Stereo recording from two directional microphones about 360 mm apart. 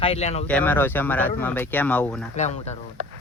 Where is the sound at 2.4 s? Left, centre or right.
Centre.